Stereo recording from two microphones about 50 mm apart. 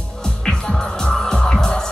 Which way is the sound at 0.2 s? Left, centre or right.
Centre.